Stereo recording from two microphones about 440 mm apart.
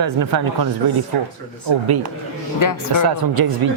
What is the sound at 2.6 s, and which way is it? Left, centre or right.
Speech, left.